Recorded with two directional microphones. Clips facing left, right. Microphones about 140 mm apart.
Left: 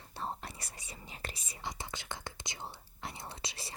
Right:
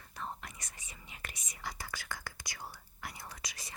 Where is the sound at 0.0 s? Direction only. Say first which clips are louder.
Left 3 dB; 30° left (ahead or behind).